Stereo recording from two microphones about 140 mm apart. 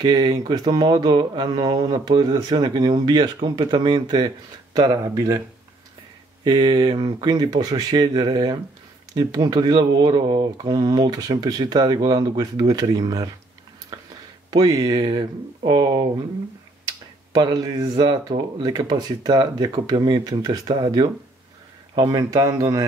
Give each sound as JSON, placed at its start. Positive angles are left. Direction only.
{"t": 0.0, "sound": "speech", "side_deg": -30}
{"t": 6.4, "sound": "speech", "side_deg": -35}
{"t": 14.5, "sound": "speech", "side_deg": -25}
{"t": 17.3, "sound": "speech", "side_deg": -25}